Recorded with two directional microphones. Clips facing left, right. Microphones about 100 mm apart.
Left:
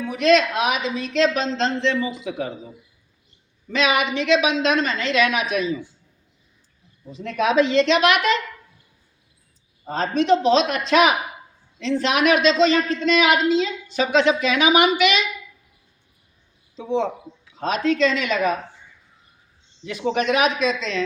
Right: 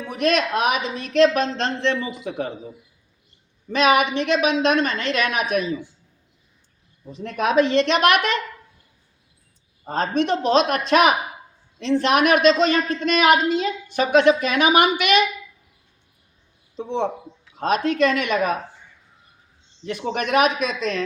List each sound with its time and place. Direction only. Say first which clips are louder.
0.1 s a man's voice: left 3 dB; 50° right (ahead or behind)
3.8 s a man's voice: right 3 dB; 50° right (ahead or behind)
7.2 s a man's voice: even; 50° right (ahead or behind)
9.9 s a man's voice: left 2 dB; 50° right (ahead or behind)
16.7 s a man's voice: left 1 dB; 55° right (ahead or behind)
19.8 s a man's voice: left 3 dB; 50° right (ahead or behind)